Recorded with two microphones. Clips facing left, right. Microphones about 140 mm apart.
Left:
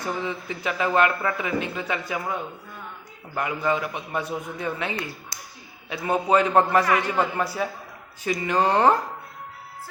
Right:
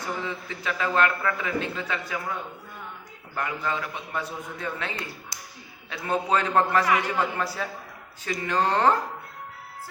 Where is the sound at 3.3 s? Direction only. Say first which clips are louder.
Left 4 dB; 15° left (ahead or behind).